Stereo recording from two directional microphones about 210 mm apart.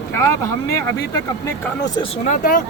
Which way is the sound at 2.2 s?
35° left (ahead or behind).